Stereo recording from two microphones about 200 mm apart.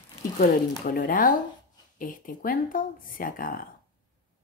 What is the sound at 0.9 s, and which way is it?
Speech, 45° left (ahead or behind).